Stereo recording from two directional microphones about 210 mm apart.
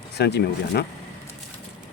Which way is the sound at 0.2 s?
50° left (ahead or behind).